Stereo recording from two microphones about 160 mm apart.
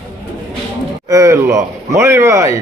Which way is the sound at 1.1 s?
20° right (ahead or behind).